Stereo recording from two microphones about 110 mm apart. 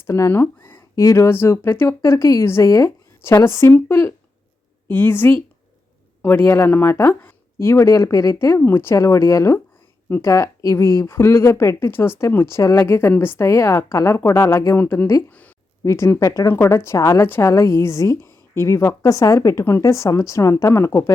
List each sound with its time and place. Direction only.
0.0 s a woman's voice: 25° left (ahead or behind)
15.8 s a woman's voice: 25° left (ahead or behind)